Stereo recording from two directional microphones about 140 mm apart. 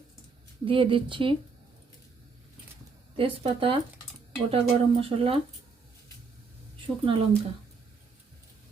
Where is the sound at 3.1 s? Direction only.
40° right (ahead or behind).